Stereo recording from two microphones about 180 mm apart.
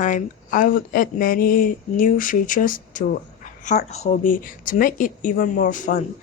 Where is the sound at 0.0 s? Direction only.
45° left (ahead or behind).